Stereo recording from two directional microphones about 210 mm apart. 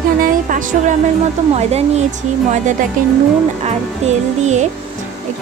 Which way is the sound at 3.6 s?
30° right (ahead or behind).